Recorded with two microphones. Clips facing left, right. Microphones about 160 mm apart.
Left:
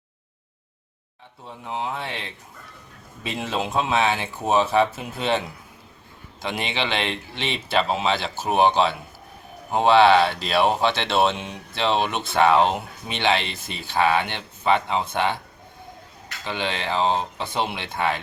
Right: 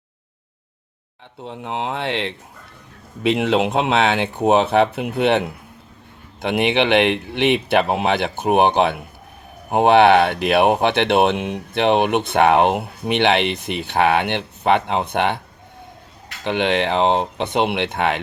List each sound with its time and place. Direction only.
1.5 s speech: 70° right (ahead or behind)
16.4 s speech: 60° right (ahead or behind)